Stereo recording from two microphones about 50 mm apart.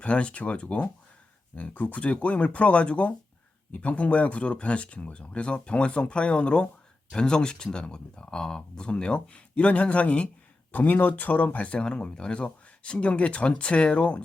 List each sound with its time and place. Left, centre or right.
0.0 s speech: left